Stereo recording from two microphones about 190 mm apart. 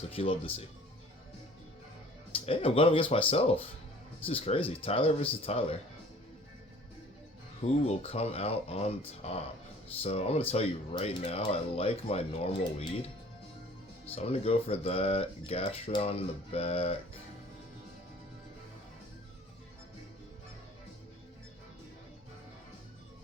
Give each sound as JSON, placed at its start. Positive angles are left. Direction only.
{"t": 0.1, "sound": "speech", "side_deg": 30}
{"t": 2.3, "sound": "speech", "side_deg": 30}
{"t": 7.9, "sound": "speech", "side_deg": 35}
{"t": 14.2, "sound": "speech", "side_deg": 30}